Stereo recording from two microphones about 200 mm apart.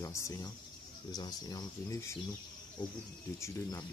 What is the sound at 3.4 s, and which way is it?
Speech, 15° left (ahead or behind).